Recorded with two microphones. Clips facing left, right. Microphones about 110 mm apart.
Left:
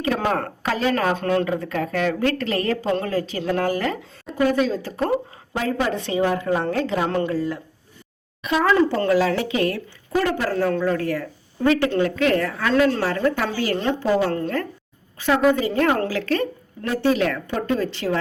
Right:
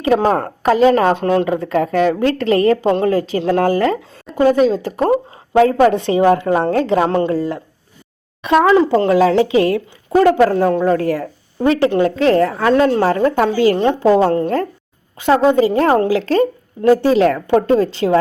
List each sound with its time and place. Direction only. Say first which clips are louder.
0.0 s a woman's voice: right 8 dB; 35° right (ahead or behind)
8.6 s a woman's voice: right 4 dB; 20° right (ahead or behind)
13.1 s a woman's voice: right 7 dB; 35° right (ahead or behind)